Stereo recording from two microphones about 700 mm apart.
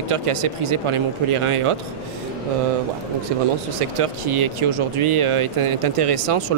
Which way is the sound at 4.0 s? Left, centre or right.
Right.